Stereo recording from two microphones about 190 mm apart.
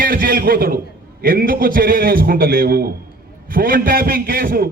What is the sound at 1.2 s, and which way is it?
A man's voice, 50° right (ahead or behind).